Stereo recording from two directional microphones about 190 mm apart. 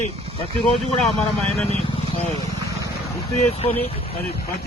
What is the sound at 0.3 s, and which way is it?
Speech, 30° left (ahead or behind).